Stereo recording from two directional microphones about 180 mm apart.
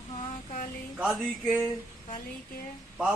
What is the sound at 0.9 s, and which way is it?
Speech, 5° right (ahead or behind).